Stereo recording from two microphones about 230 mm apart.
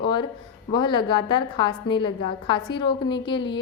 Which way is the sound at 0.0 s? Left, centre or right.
Centre.